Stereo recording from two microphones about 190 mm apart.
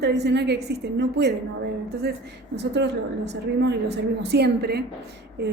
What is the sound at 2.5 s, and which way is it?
A woman's voice, 65° right (ahead or behind).